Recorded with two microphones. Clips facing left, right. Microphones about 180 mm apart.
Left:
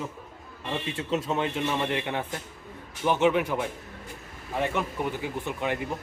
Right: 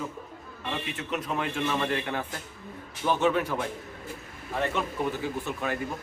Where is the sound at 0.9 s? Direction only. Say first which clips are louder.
Left 5 dB; 25° left (ahead or behind).